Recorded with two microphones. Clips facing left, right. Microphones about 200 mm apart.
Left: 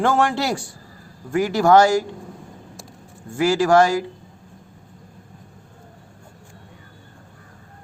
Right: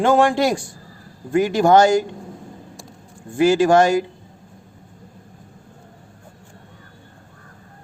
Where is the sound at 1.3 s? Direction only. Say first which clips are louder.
Right 1 dB; 20° right (ahead or behind).